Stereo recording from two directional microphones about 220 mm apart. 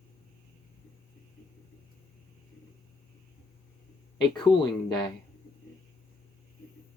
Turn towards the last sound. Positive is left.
turn(degrees=20)  # may be behind; listen again after turning